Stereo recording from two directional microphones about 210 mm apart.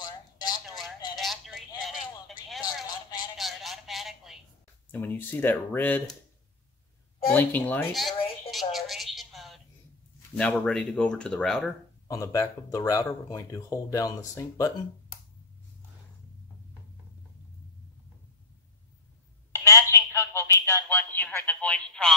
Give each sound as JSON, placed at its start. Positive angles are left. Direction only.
{"t": 0.0, "sound": "a sound", "side_deg": 20}
{"t": 1.1, "sound": "telephone", "side_deg": 0}
{"t": 2.6, "sound": "a sound", "side_deg": 20}
{"t": 3.3, "sound": "telephone", "side_deg": 0}
{"t": 4.9, "sound": "speech", "side_deg": 10}
{"t": 7.3, "sound": "a sound", "side_deg": 10}
{"t": 10.3, "sound": "speech", "side_deg": 5}
{"t": 12.1, "sound": "speech", "side_deg": 15}
{"t": 19.5, "sound": "telephone", "side_deg": 15}